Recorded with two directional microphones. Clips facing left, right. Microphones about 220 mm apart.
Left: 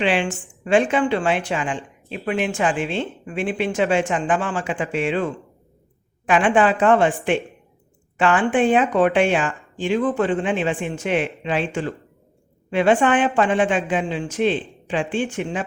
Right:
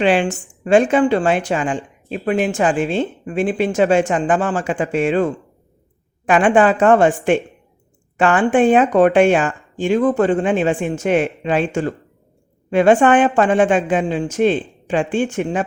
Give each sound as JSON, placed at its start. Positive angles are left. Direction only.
{"t": 0.0, "sound": "a woman's voice", "side_deg": -40}